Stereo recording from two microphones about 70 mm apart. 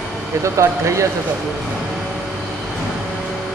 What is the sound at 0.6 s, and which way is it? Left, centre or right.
Speech, right.